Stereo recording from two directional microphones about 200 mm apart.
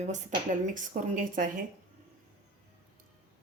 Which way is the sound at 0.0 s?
35° right (ahead or behind).